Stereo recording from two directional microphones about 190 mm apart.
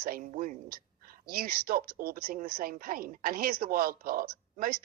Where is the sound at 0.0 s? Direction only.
50° right (ahead or behind).